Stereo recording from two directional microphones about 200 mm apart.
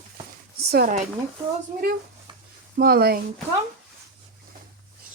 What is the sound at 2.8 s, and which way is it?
Speech, 50° right (ahead or behind).